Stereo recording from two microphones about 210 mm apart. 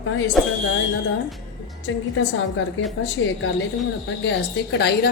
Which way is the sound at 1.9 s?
65° left (ahead or behind).